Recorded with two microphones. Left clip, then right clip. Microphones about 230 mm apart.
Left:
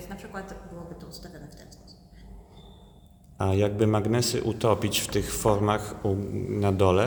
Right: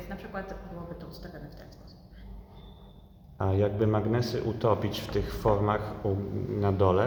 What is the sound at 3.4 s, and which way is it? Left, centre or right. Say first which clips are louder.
Speech: left 3 dB; left.